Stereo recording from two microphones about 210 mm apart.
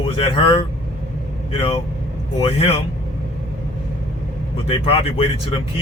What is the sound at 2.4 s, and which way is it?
Speech, 25° left (ahead or behind).